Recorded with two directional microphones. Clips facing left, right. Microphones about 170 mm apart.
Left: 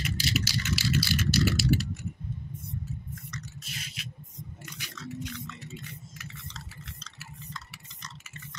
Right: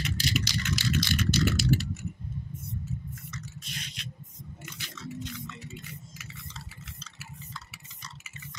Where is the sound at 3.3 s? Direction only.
5° left (ahead or behind).